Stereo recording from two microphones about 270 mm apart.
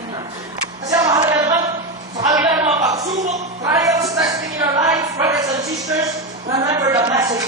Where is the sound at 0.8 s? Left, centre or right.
Centre.